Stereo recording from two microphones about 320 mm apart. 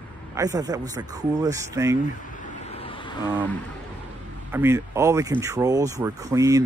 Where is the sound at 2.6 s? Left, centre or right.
Centre.